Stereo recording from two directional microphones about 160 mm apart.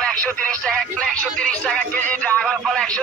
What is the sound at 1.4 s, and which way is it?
Music, 5° left (ahead or behind).